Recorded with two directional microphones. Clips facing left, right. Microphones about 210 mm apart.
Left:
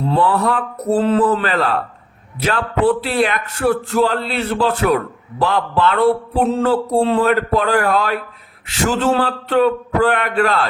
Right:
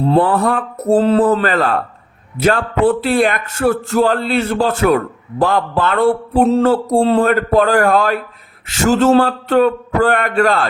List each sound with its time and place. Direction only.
0.2 s speech: 50° right (ahead or behind)